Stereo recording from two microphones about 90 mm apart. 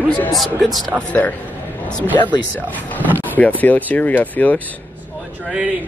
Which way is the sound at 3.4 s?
20° left (ahead or behind).